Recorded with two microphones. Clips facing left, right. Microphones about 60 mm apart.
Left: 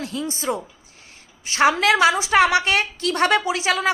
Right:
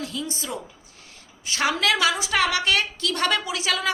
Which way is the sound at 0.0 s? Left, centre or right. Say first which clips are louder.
Left 5 dB; left.